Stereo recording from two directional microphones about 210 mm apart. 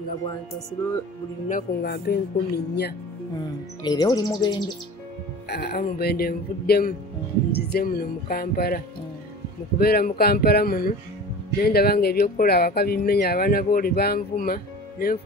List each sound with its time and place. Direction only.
1.5 s speech: 50° left (ahead or behind)
3.8 s speech: 20° left (ahead or behind)
5.5 s speech: 50° left (ahead or behind)